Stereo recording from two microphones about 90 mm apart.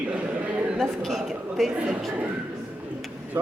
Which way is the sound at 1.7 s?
15° right (ahead or behind).